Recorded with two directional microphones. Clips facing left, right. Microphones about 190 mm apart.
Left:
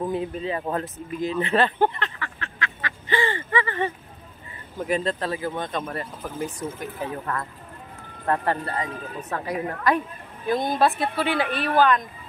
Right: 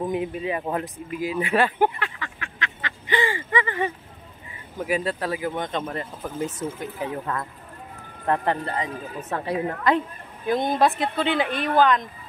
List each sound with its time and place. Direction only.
0.0 s a woman's voice: 15° right (ahead or behind)